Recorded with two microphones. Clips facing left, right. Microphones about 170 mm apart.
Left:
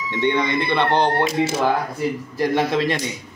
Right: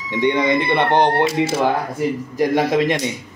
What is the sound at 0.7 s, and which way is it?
Speech, 20° right (ahead or behind).